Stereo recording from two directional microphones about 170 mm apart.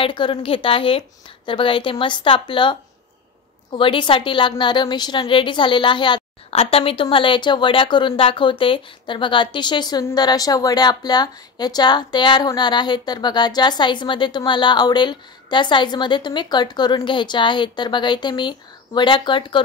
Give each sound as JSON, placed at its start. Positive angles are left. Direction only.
{"t": 0.0, "sound": "a woman's voice", "side_deg": 30}